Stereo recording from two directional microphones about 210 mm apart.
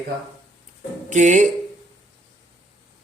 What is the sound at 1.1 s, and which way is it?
Speech, 35° right (ahead or behind).